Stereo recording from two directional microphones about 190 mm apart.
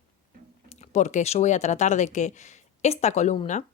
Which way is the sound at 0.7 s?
35° left (ahead or behind).